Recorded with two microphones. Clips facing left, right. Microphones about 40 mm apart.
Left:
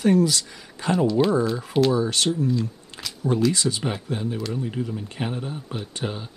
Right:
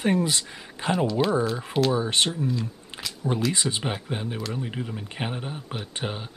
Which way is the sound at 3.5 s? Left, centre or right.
Right.